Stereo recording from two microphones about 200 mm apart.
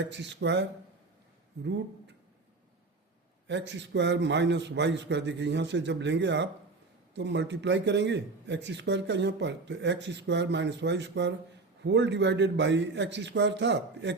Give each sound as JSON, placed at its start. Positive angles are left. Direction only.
{"t": 0.1, "sound": "speech", "side_deg": -60}
{"t": 3.4, "sound": "speech", "side_deg": -60}